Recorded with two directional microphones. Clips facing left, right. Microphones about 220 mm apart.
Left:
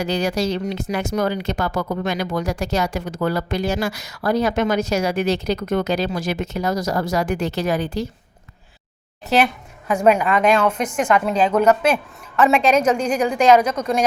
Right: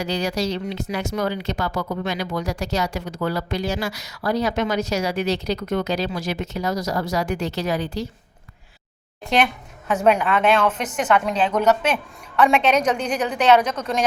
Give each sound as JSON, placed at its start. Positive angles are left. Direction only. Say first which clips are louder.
{"t": 0.0, "sound": "speech", "louder": "left 3 dB", "side_deg": 50}
{"t": 9.2, "sound": "a woman's voice", "louder": "left 2 dB", "side_deg": 5}